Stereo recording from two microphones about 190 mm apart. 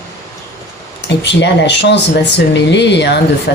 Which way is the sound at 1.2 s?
65° left (ahead or behind).